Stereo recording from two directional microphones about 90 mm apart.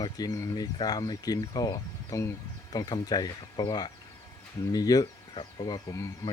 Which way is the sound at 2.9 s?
50° left (ahead or behind).